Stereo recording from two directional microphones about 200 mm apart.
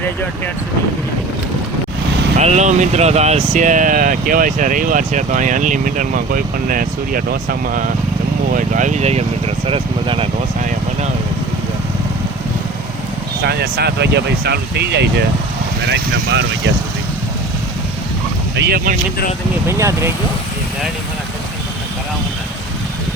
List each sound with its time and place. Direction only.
2.4 s speech: 35° right (ahead or behind)
13.4 s speech: 55° right (ahead or behind)
18.5 s speech: 60° right (ahead or behind)
19.6 s speech: 15° right (ahead or behind)